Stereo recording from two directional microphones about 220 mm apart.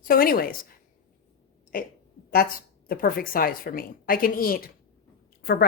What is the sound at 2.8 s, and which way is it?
A woman's voice, 40° left (ahead or behind).